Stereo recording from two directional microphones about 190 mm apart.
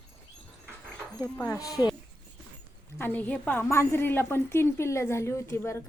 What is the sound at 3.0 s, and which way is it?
A woman's voice, 10° left (ahead or behind).